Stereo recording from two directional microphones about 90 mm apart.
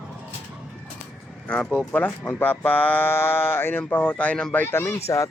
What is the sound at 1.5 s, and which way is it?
Speech, 10° left (ahead or behind).